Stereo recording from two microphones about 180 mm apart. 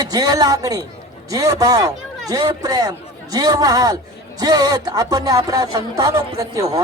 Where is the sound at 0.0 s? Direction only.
20° right (ahead or behind).